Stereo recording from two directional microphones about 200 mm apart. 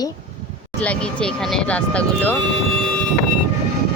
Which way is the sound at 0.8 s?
5° left (ahead or behind).